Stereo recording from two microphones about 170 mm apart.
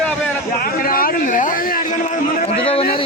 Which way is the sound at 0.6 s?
60° left (ahead or behind).